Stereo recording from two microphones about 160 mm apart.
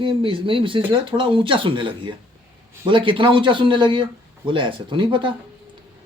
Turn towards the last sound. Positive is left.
turn(degrees=-30)  # may be behind; listen again after turning